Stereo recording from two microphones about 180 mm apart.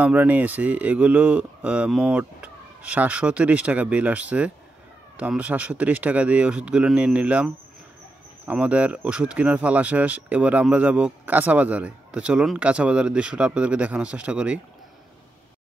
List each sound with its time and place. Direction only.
0.0 s speech: 10° right (ahead or behind)